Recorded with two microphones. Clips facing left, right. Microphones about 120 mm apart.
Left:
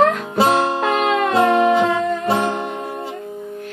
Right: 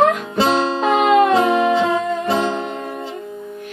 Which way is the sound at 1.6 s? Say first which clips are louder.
Left 1 dB; 10° left (ahead or behind).